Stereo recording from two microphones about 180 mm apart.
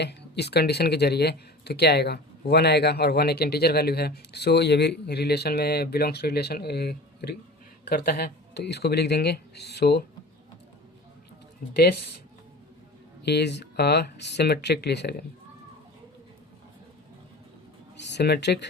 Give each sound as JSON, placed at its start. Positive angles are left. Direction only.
{"t": 0.0, "sound": "speech", "side_deg": 65}
{"t": 11.8, "sound": "speech", "side_deg": 60}
{"t": 13.2, "sound": "speech", "side_deg": 70}
{"t": 17.9, "sound": "speech", "side_deg": 75}